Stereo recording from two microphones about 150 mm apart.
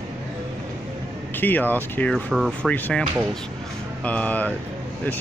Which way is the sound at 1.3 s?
15° left (ahead or behind).